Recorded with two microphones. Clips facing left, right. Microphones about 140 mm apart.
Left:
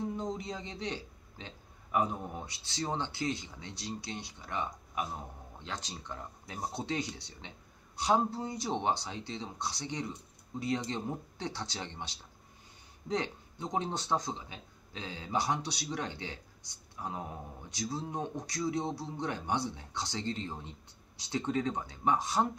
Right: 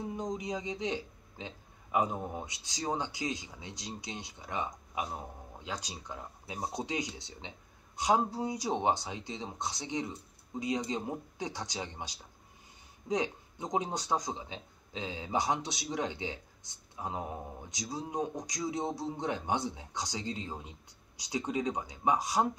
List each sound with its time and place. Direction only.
0.1 s a man's voice: 15° right (ahead or behind)